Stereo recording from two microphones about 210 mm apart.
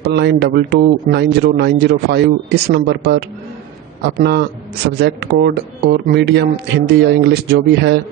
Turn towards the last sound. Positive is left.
turn(degrees=-50)  # may be behind; listen again after turning